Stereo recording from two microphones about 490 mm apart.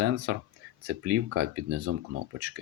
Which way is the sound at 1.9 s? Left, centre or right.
Right.